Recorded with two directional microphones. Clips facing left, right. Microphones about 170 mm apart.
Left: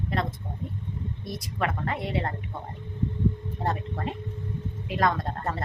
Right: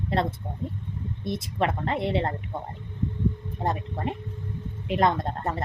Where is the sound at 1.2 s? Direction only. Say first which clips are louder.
Right 4 dB; 25° right (ahead or behind).